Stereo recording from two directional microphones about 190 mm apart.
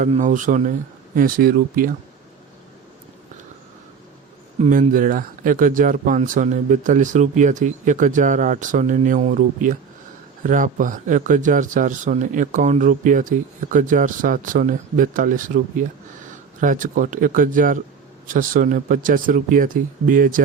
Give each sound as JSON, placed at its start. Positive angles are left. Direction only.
{"t": 0.0, "sound": "speech", "side_deg": -40}
{"t": 4.6, "sound": "speech", "side_deg": -45}